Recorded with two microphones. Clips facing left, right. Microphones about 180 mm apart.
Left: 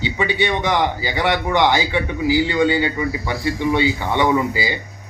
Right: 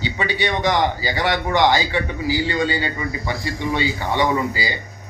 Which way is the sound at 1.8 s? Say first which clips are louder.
Left 2 dB; 15° left (ahead or behind).